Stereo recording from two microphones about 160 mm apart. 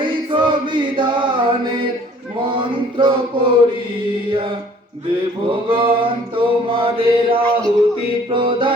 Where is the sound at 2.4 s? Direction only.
30° right (ahead or behind).